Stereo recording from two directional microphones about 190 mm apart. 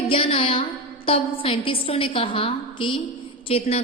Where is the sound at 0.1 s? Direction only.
30° left (ahead or behind).